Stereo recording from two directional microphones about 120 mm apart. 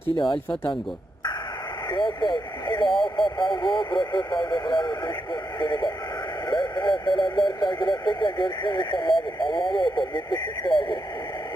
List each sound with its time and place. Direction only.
1.9 s speech: 40° left (ahead or behind)